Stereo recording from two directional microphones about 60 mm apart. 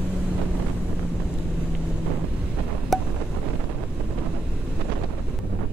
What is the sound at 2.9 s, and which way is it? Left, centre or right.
Wind, centre.